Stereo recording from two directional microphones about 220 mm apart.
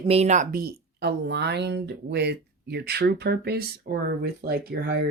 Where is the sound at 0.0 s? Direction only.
30° right (ahead or behind).